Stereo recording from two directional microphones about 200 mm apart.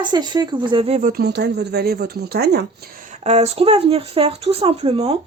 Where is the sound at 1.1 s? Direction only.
55° right (ahead or behind).